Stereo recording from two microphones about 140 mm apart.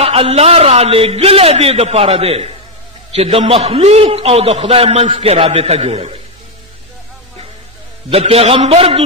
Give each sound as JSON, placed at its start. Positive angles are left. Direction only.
{"t": 0.0, "sound": "a man's voice", "side_deg": -45}
{"t": 8.1, "sound": "a man's voice", "side_deg": -45}